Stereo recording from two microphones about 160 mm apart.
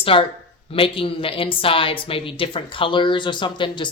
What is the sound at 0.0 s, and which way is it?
Speech, 35° left (ahead or behind).